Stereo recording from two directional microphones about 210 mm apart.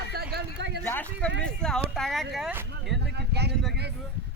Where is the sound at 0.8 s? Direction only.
10° left (ahead or behind); by 2.9 s 5° right (ahead or behind).